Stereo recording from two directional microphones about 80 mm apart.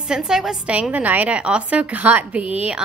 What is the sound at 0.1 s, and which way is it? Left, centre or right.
A woman's voice, centre.